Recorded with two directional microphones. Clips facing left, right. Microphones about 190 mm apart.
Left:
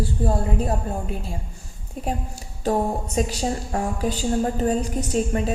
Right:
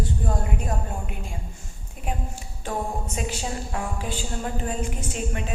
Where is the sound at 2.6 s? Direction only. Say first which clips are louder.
Left 7 dB; 35° left (ahead or behind).